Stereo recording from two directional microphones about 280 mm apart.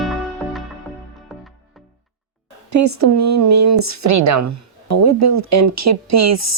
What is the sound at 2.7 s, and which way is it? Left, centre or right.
Speech, right.